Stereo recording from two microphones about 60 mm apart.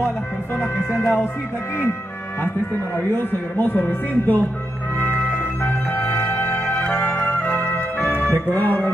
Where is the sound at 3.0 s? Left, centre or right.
Left.